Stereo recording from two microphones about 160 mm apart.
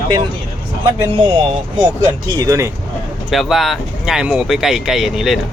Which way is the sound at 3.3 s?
Centre (ahead or behind).